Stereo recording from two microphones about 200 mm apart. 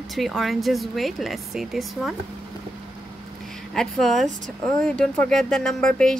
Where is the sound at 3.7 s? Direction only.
Centre (ahead or behind).